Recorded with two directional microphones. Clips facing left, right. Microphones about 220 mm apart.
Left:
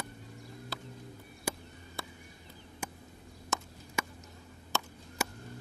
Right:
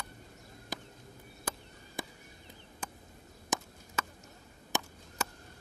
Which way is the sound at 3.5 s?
15° right (ahead or behind).